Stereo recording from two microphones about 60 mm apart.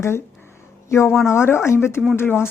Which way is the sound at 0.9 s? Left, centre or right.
Left.